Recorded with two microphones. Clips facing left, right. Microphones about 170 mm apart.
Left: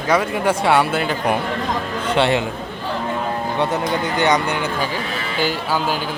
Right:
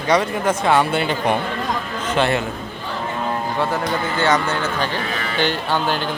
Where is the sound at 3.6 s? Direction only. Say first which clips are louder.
Left 2 dB; 20° left (ahead or behind).